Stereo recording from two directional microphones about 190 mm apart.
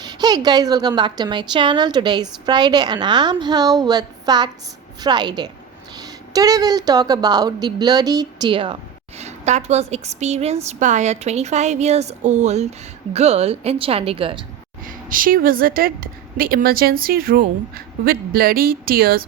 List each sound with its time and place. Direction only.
0.0 s a woman's voice: 20° right (ahead or behind)
14.8 s a woman's voice: 45° right (ahead or behind)